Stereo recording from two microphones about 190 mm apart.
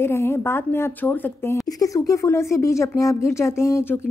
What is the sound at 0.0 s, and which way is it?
A woman's voice, 15° left (ahead or behind).